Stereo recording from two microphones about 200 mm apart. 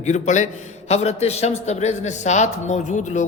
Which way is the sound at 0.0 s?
35° left (ahead or behind).